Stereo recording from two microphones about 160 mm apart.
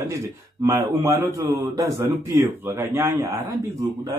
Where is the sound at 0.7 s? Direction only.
20° right (ahead or behind).